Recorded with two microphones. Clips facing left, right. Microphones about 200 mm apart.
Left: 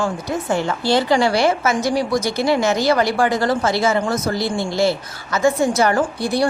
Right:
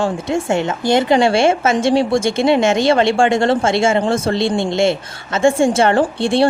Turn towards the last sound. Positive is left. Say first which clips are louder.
# right 4 dB
turn(degrees=-25)  # may be behind; listen again after turning